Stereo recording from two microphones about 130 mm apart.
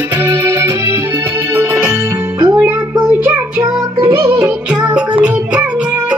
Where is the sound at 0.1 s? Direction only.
20° right (ahead or behind).